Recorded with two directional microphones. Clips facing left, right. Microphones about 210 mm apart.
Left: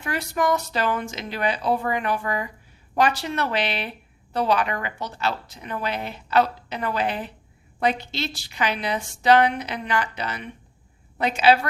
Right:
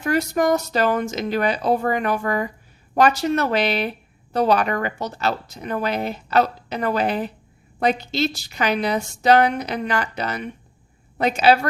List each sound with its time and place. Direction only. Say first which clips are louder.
0.0 s speech: right 5 dB; 40° right (ahead or behind)